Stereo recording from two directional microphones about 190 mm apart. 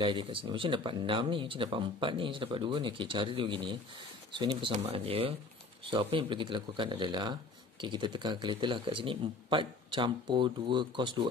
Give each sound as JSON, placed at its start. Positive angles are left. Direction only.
{"t": 0.0, "sound": "speech", "side_deg": -25}